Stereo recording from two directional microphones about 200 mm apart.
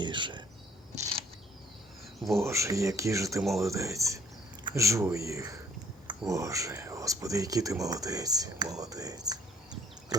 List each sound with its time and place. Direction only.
0.0 s speech: 25° right (ahead or behind)
2.4 s speech: 15° right (ahead or behind)
10.1 s a sound: 20° right (ahead or behind)